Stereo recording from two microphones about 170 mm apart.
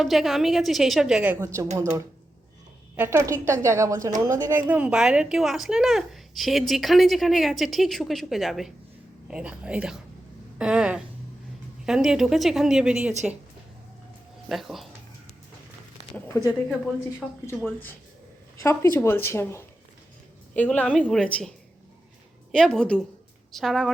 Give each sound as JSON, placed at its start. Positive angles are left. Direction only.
{"t": 0.0, "sound": "a woman's voice", "side_deg": 0}
{"t": 1.7, "sound": "a woman's voice", "side_deg": -20}
{"t": 14.5, "sound": "a woman's voice", "side_deg": 0}
{"t": 16.3, "sound": "speech", "side_deg": 15}
{"t": 18.5, "sound": "a woman's voice", "side_deg": 15}
{"t": 22.5, "sound": "a woman's voice", "side_deg": 0}